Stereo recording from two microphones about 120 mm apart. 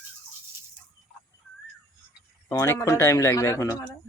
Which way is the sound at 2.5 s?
25° left (ahead or behind).